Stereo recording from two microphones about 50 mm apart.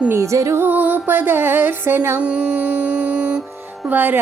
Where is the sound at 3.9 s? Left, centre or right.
Right.